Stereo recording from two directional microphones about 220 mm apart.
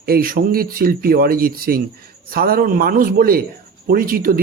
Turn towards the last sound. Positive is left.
turn(degrees=-40)  # may be behind; listen again after turning